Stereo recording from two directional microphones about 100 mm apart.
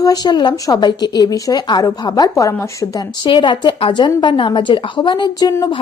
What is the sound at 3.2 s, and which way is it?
Speech, 55° left (ahead or behind).